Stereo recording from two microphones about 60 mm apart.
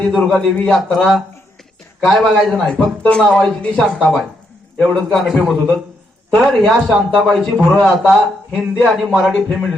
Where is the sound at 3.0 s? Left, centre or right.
Centre.